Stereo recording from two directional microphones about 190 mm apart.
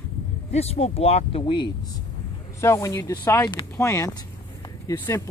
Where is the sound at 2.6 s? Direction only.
15° left (ahead or behind).